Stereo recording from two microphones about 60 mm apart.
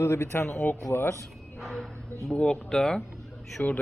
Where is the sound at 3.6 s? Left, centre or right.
Left.